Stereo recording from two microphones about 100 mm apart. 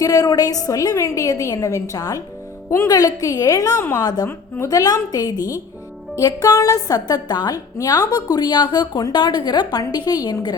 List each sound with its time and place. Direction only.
0.0 s a woman's voice: 40° left (ahead or behind)
3.8 s a woman's voice: 25° left (ahead or behind)
4.7 s a woman's voice: 40° left (ahead or behind)